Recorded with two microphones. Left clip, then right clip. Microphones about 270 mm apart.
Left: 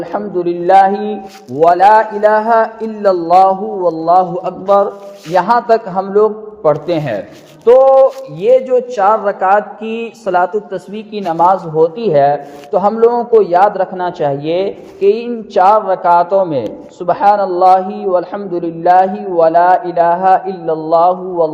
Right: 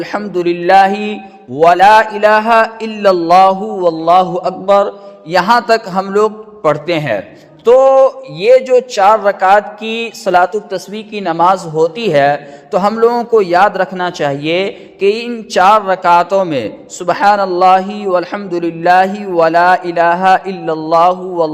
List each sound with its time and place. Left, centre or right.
0.0 s a man's voice: right